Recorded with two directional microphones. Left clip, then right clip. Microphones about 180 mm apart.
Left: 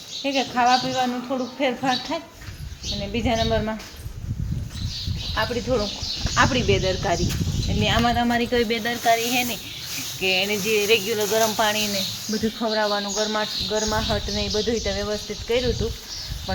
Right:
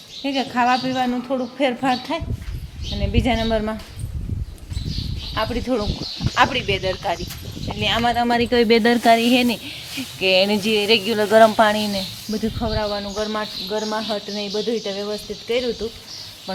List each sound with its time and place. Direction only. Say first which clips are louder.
0.2 s speech: right 1 dB; 35° right (ahead or behind)
5.3 s speech: right 1 dB; 35° right (ahead or behind)
12.5 s speech: left 2 dB; 15° right (ahead or behind)